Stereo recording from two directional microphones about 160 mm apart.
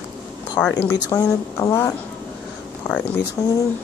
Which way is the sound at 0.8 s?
10° left (ahead or behind).